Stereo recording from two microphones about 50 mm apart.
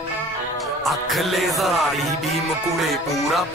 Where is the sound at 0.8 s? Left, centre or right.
Centre.